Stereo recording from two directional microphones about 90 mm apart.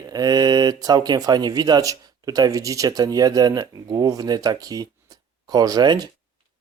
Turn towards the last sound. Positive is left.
turn(degrees=-50)  # may be behind; listen again after turning